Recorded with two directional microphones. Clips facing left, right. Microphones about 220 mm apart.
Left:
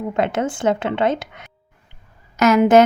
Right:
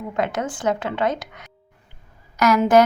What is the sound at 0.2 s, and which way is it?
A woman's voice, 25° left (ahead or behind).